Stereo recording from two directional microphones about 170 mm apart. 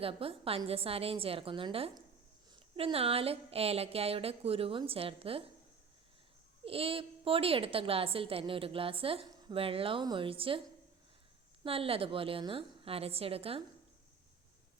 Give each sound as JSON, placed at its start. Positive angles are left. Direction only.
{"t": 0.0, "sound": "a woman's voice", "side_deg": -35}
{"t": 6.7, "sound": "a woman's voice", "side_deg": -35}
{"t": 11.6, "sound": "a woman's voice", "side_deg": -35}